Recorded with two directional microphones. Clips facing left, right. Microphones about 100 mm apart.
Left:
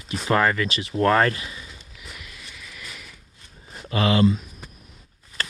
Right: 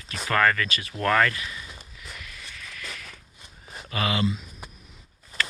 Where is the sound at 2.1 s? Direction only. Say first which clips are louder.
Right 1 dB; 15° left (ahead or behind).